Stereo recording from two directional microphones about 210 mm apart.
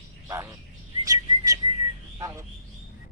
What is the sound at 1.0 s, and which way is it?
Whistling, 15° right (ahead or behind).